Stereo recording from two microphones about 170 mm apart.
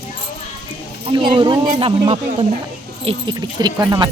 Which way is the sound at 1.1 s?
30° right (ahead or behind).